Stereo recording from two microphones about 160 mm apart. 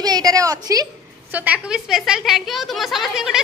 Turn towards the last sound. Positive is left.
turn(degrees=0)  # may be behind; listen again after turning